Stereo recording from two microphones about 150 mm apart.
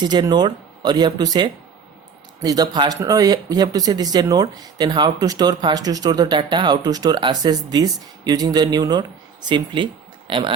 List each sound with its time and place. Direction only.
0.0 s speech: 30° right (ahead or behind)